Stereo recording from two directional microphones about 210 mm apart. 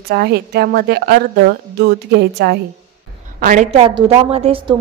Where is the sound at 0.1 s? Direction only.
50° right (ahead or behind).